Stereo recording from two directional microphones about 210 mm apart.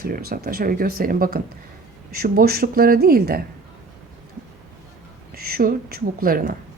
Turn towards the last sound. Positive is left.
turn(degrees=-45)  # may be behind; listen again after turning